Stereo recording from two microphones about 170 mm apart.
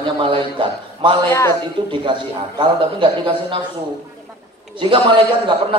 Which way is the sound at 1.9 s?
30° right (ahead or behind).